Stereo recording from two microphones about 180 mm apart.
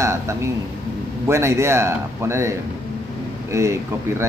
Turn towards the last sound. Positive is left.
turn(degrees=-15)  # may be behind; listen again after turning